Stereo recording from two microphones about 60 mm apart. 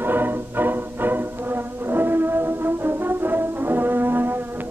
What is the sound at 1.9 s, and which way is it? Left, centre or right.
Brass instrument, right.